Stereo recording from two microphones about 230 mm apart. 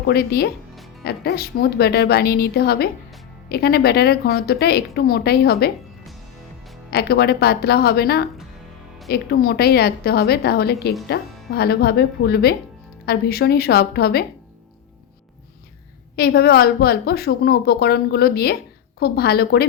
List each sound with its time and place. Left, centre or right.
0.1 s a woman's voice: left
6.9 s a woman's voice: left
16.1 s a woman's voice: left